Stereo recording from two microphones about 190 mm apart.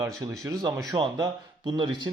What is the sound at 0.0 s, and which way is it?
Speech, 20° right (ahead or behind).